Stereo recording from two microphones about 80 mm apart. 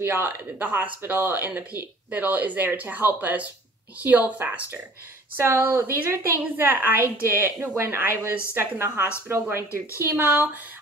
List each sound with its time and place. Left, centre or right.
0.0 s a woman's voice: right